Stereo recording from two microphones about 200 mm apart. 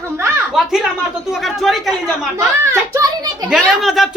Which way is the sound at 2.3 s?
15° right (ahead or behind).